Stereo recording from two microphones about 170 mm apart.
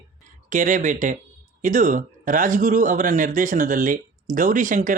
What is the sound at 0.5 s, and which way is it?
A man's voice, 50° right (ahead or behind).